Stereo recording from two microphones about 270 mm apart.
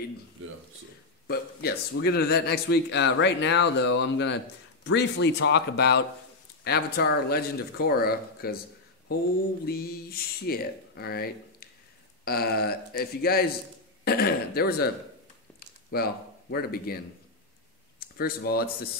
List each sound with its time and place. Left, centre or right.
1.2 s a man's voice: left
9.7 s a man's voice: left
12.3 s a man's voice: left
15.9 s speech: left